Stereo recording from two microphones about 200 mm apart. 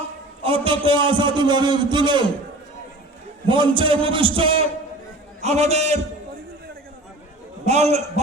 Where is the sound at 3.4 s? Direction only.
25° right (ahead or behind).